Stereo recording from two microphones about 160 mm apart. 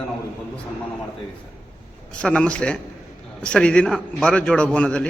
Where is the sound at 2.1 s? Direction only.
5° left (ahead or behind).